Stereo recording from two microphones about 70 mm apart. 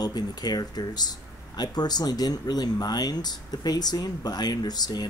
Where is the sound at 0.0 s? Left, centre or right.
Left.